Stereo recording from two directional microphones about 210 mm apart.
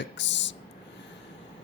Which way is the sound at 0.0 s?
55° left (ahead or behind).